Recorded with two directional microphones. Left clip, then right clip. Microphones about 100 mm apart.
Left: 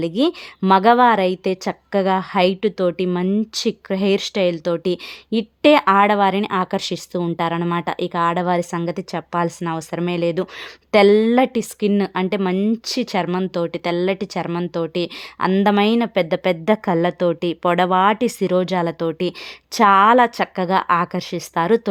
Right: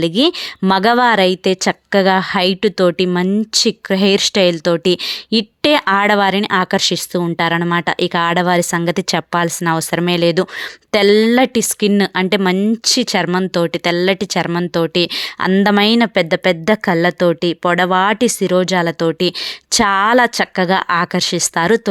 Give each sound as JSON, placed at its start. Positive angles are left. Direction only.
{"t": 0.0, "sound": "a woman's voice", "side_deg": -30}
{"t": 9.0, "sound": "a woman's voice", "side_deg": -45}
{"t": 11.0, "sound": "speech", "side_deg": -15}
{"t": 11.3, "sound": "a woman's voice", "side_deg": -30}
{"t": 17.9, "sound": "a woman's voice", "side_deg": -35}
{"t": 18.2, "sound": "speech", "side_deg": -20}